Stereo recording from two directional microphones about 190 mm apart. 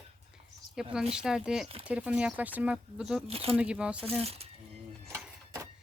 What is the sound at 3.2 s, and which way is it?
Speech, 30° right (ahead or behind).